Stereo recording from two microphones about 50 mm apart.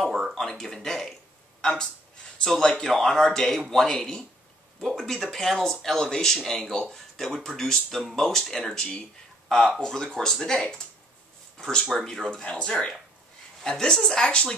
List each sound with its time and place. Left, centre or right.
0.3 s speech: centre